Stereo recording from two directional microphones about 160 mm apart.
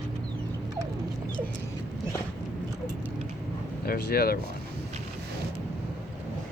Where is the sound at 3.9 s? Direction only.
75° left (ahead or behind).